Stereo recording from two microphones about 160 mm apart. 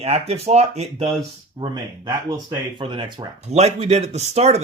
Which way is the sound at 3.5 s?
45° right (ahead or behind).